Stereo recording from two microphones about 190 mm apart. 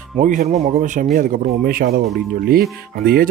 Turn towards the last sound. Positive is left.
turn(degrees=-50)  # may be behind; listen again after turning